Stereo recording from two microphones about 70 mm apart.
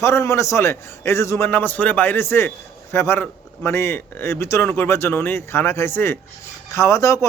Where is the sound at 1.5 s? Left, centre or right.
Left.